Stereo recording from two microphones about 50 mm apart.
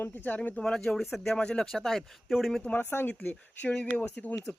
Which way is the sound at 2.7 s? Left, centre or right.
Left.